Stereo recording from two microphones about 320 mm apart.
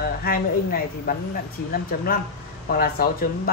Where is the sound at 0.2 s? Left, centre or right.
Left.